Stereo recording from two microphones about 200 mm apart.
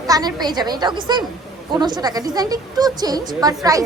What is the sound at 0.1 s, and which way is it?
A woman's voice, 20° right (ahead or behind).